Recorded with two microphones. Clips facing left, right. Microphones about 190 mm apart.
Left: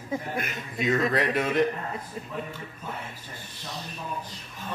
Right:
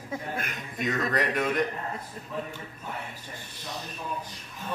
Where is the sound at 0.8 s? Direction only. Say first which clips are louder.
Left 3 dB; 5° left (ahead or behind).